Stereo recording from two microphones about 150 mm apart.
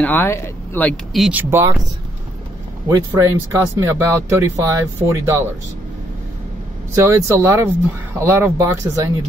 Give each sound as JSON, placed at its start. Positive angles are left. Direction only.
{"t": 0.0, "sound": "speech", "side_deg": 15}
{"t": 1.3, "sound": "speech", "side_deg": -15}
{"t": 2.9, "sound": "speech", "side_deg": -20}
{"t": 7.1, "sound": "speech", "side_deg": -20}